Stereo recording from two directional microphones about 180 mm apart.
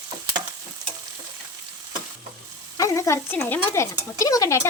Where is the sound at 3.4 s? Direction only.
15° left (ahead or behind).